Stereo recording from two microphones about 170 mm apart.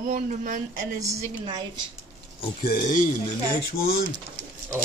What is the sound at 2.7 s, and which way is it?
Speech, 50° left (ahead or behind).